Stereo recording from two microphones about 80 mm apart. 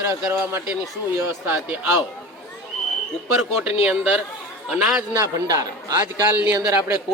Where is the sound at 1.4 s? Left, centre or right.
Right.